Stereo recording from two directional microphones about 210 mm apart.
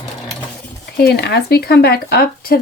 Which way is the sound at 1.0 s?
50° left (ahead or behind).